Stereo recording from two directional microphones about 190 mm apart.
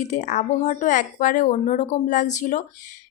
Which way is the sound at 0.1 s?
40° left (ahead or behind).